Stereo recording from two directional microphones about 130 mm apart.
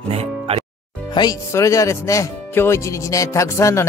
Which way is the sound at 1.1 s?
35° left (ahead or behind).